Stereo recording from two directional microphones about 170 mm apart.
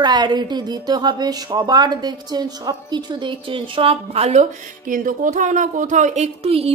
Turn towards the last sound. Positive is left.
turn(degrees=-35)  # may be behind; listen again after turning